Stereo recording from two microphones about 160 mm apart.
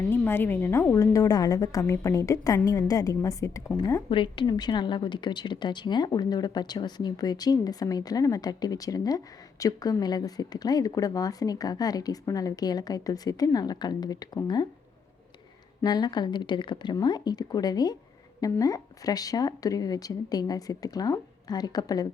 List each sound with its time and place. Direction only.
0.1 s a woman's voice: 15° left (ahead or behind)
4.1 s a woman's voice: 30° left (ahead or behind)
15.8 s a woman's voice: 25° left (ahead or behind)